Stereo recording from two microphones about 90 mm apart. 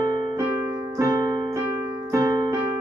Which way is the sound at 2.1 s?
35° right (ahead or behind).